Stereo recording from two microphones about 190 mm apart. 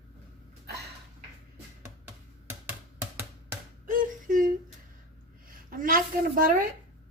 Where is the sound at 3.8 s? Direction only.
45° right (ahead or behind).